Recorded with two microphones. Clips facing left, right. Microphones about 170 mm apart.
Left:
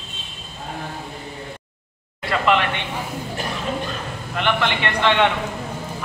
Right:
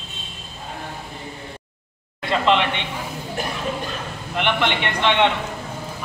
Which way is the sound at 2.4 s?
20° right (ahead or behind).